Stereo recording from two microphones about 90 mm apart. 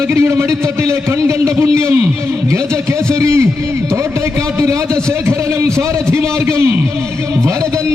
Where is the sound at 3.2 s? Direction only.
35° right (ahead or behind).